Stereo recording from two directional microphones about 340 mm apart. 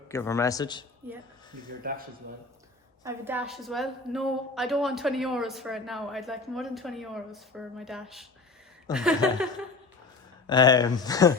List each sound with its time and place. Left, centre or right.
0.1 s speech: centre
1.8 s a man's voice: right
3.0 s a woman's voice: centre
10.4 s speech: centre